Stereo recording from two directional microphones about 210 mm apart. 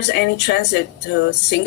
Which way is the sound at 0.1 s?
55° left (ahead or behind).